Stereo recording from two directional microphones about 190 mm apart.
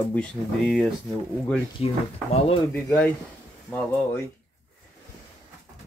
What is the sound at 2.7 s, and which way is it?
Speech, 10° left (ahead or behind).